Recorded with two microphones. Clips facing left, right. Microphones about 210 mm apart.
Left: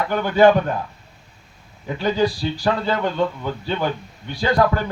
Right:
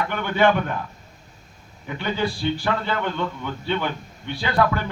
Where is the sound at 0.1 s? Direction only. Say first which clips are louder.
Left 7 dB; 40° left (ahead or behind).